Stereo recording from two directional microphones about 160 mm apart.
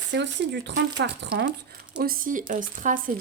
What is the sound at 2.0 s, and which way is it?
Speech, 65° right (ahead or behind).